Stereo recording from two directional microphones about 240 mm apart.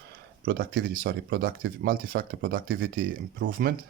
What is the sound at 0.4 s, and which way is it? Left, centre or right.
Speech, right.